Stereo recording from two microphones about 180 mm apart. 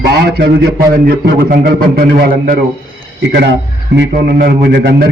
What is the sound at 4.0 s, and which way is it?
A man's voice, 60° right (ahead or behind).